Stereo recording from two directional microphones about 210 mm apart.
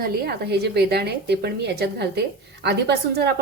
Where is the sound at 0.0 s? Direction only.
50° right (ahead or behind).